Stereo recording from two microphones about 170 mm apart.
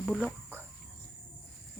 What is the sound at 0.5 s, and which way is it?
Cricket, 10° left (ahead or behind).